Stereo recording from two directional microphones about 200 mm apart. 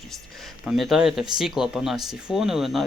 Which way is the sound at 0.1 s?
Centre (ahead or behind).